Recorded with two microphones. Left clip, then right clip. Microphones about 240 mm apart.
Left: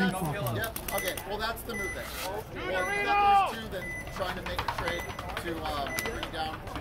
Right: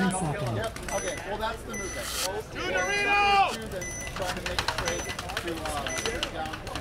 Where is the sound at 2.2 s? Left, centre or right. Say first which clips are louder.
Right 3 dB; right.